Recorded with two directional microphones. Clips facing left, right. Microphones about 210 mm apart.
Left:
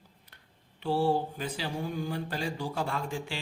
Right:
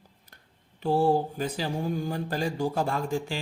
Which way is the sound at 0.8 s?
45° right (ahead or behind).